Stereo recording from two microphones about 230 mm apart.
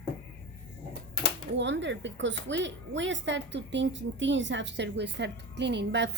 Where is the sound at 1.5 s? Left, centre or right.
Right.